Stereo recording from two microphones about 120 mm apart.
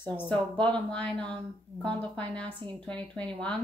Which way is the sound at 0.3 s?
10° left (ahead or behind).